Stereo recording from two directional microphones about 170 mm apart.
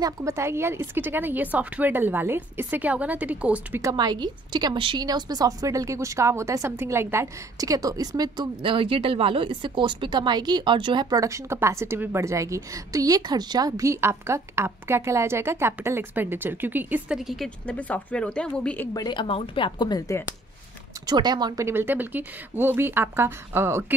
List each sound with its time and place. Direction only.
0.0 s speech: 20° right (ahead or behind)
3.8 s a woman's voice: 25° right (ahead or behind); by 18.9 s 5° left (ahead or behind)
18.9 s speech: 25° left (ahead or behind)
21.1 s speech: 25° right (ahead or behind)